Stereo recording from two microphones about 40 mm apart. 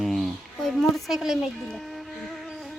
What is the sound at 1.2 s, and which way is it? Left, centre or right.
Speech, centre.